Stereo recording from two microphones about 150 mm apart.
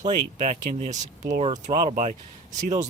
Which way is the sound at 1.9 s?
60° right (ahead or behind).